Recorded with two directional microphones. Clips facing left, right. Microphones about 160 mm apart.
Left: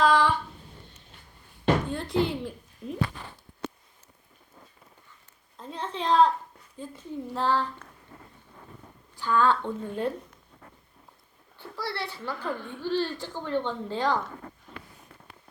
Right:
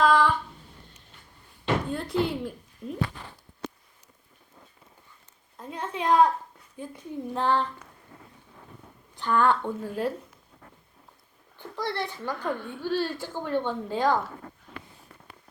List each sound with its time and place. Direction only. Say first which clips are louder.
0.0 s a sound: right 1 dB; centre (ahead or behind)
1.9 s speech: even; 5° right (ahead or behind)
5.5 s a sound: right 1 dB; 10° right (ahead or behind)
6.7 s a woman's voice: right 1 dB; 15° right (ahead or behind)
9.1 s a woman's voice: right 1 dB; 20° right (ahead or behind)
11.5 s a child's voice: right 3 dB; 15° right (ahead or behind)
12.4 s a woman's voice: right 2 dB; centre (ahead or behind)